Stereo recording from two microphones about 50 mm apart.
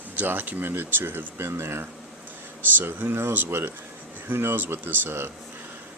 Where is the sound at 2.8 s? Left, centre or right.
Right.